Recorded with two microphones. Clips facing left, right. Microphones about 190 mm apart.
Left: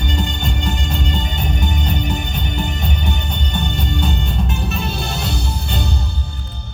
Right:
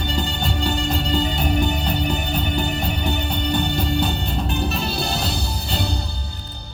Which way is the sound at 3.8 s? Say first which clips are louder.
Right 1 dB; 35° right (ahead or behind).